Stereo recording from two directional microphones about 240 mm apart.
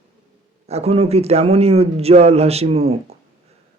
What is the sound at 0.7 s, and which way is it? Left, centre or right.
Speech, right.